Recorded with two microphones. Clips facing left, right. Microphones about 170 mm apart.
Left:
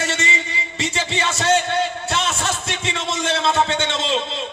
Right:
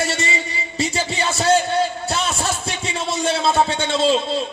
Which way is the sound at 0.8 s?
40° right (ahead or behind).